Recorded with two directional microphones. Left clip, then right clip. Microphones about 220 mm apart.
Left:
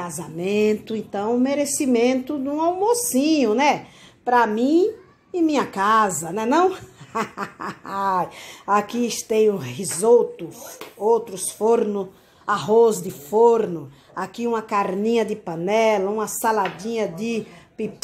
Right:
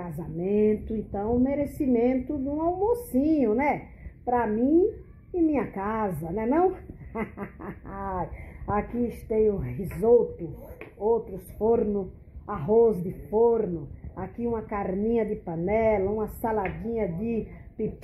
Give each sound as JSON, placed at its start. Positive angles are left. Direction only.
{"t": 0.2, "sound": "a woman's voice", "side_deg": 35}